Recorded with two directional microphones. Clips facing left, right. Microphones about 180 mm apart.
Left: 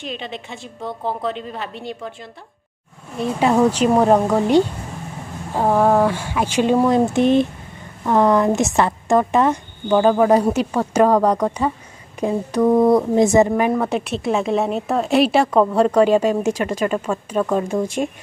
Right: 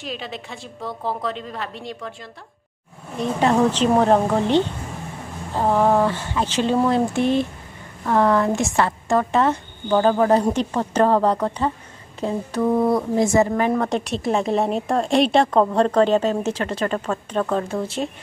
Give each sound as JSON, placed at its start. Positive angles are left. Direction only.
{"t": 0.0, "sound": "a woman's voice", "side_deg": -5}
{"t": 3.2, "sound": "a woman's voice", "side_deg": 10}